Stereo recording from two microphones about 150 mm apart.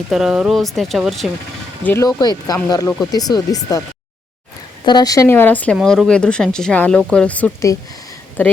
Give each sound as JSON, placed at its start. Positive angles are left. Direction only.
{"t": 0.1, "sound": "speech", "side_deg": -5}
{"t": 1.8, "sound": "speech", "side_deg": 15}
{"t": 2.0, "sound": "speech", "side_deg": 25}
{"t": 4.9, "sound": "speech", "side_deg": 25}
{"t": 5.7, "sound": "speech", "side_deg": 0}